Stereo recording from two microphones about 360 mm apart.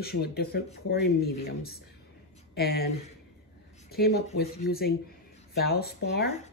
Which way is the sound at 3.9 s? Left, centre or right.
Left.